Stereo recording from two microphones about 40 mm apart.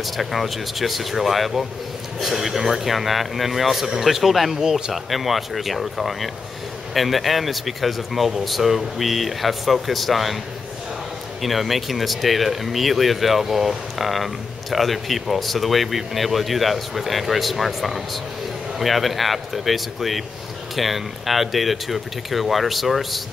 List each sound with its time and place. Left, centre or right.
0.0 s speech: centre
4.6 s speech: centre
4.9 s speech: centre
11.4 s speech: centre